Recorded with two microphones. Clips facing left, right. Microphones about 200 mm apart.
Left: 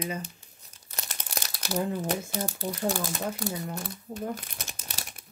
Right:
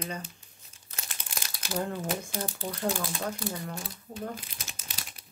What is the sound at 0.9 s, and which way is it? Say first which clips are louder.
Crumpling: left 5 dB; 40° left (ahead or behind).